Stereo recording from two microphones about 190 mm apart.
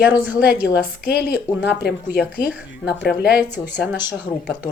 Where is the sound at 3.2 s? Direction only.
55° left (ahead or behind).